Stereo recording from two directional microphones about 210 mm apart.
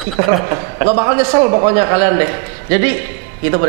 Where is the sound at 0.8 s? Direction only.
20° right (ahead or behind).